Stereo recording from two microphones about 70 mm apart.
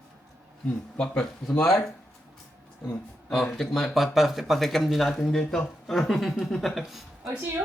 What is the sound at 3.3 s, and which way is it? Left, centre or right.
A woman's voice, centre.